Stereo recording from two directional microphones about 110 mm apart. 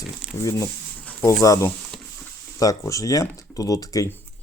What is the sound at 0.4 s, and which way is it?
Speech, 25° left (ahead or behind).